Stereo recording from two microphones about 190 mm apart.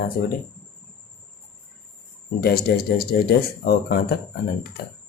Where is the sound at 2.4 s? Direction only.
55° left (ahead or behind).